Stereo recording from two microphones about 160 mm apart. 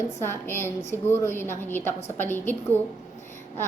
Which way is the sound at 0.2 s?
15° left (ahead or behind).